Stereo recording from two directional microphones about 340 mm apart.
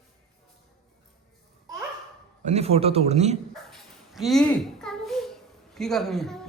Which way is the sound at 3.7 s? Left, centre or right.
Centre.